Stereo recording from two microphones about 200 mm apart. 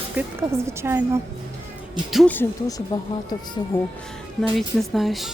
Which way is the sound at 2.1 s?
5° left (ahead or behind).